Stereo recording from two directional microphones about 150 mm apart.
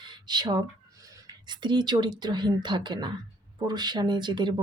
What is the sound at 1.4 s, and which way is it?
Speech, 30° right (ahead or behind).